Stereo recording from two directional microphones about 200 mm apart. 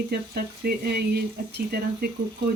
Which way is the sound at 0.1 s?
50° right (ahead or behind).